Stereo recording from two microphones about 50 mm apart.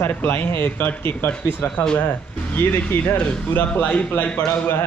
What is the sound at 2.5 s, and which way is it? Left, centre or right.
Speech, left.